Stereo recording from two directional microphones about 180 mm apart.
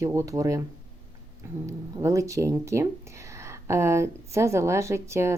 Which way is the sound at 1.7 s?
15° right (ahead or behind).